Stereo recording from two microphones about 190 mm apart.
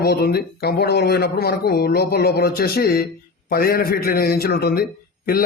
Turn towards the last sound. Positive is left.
turn(degrees=50)  # may be behind; listen again after turning